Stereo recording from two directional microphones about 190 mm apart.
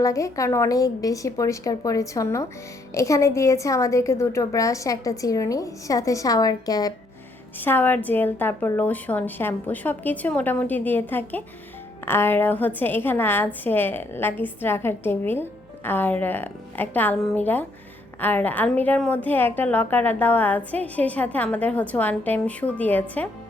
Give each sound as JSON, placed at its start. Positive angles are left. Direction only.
{"t": 0.0, "sound": "a woman's voice", "side_deg": 15}